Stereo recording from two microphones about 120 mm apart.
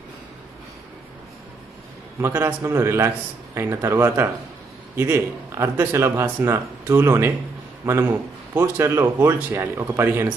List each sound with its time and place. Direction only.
2.2 s speech: 25° right (ahead or behind)